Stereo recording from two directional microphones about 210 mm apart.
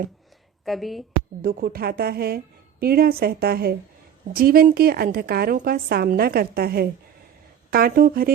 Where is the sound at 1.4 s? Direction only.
45° right (ahead or behind).